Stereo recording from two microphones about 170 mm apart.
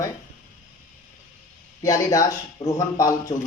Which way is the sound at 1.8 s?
20° left (ahead or behind).